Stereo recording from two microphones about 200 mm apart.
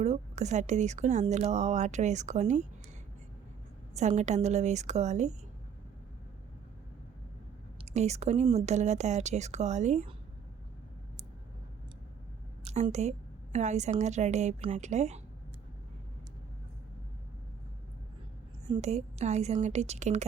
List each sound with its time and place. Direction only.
0.0 s speech: 35° right (ahead or behind)
3.9 s speech: 35° right (ahead or behind)
7.9 s speech: 35° right (ahead or behind)
12.6 s speech: 30° right (ahead or behind)
18.7 s speech: 35° right (ahead or behind)